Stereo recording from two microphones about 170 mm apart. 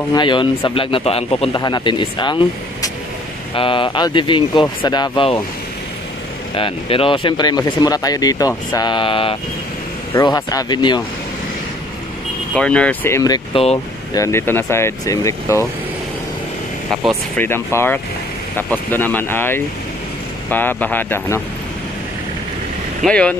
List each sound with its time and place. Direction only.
0.1 s speech: 30° left (ahead or behind)
6.5 s speech: 30° left (ahead or behind)
12.5 s speech: 5° left (ahead or behind)
13.5 s speech: 35° left (ahead or behind)
14.1 s speech: 15° left (ahead or behind)
17.4 s speech: 15° left (ahead or behind)
23.0 s speech: 5° left (ahead or behind)